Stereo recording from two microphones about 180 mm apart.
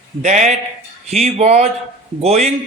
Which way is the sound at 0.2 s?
40° right (ahead or behind).